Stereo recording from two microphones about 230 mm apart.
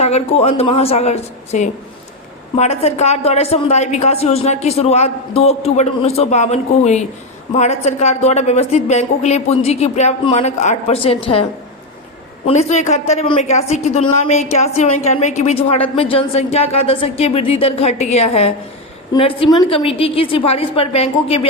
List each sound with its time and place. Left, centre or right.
0.0 s a woman's voice: left
12.5 s a woman's voice: left